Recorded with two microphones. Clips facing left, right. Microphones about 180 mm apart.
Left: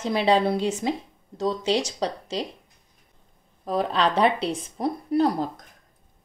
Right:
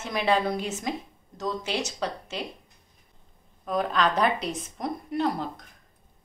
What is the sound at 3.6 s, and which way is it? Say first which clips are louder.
Speech: left 2 dB; 30° left (ahead or behind).